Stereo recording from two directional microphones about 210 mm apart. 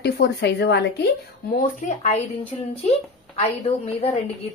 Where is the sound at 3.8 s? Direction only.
30° left (ahead or behind).